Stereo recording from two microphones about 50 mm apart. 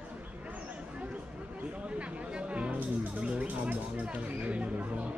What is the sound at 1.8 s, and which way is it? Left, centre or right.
Music, right.